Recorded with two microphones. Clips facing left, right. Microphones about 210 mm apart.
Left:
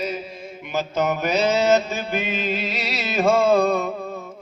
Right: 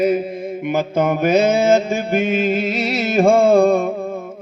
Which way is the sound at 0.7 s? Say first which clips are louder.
Right 5 dB; 55° right (ahead or behind).